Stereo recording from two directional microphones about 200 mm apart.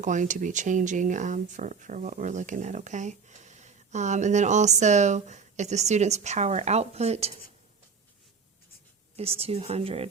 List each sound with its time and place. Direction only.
0.0 s speech: 40° right (ahead or behind)
9.4 s speech: 30° right (ahead or behind)